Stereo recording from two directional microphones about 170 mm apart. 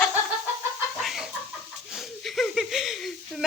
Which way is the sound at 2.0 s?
Centre (ahead or behind).